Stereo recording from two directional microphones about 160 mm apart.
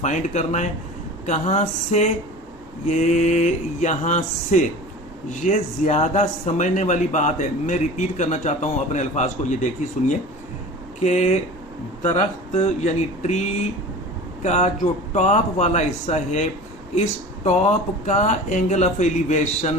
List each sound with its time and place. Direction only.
0.0 s speech: 45° left (ahead or behind)
14.4 s speech: 45° left (ahead or behind)